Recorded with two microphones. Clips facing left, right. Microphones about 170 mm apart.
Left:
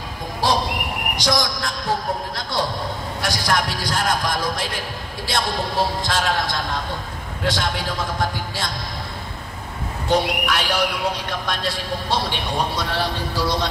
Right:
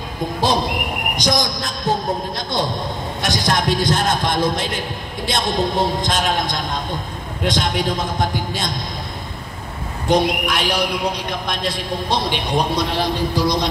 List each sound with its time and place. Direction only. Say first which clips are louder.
0.4 s speech: right 1 dB; 20° right (ahead or behind)
10.0 s a man's voice: right 3 dB; 15° right (ahead or behind)